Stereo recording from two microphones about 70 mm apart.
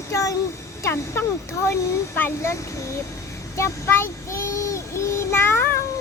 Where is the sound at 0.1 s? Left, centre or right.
Left.